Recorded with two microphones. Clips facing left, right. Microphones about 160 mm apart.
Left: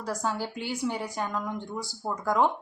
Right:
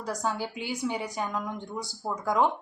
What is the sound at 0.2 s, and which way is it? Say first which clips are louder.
A woman's voice: even; 10° right (ahead or behind).